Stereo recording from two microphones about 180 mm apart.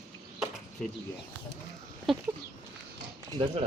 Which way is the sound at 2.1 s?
Centre (ahead or behind).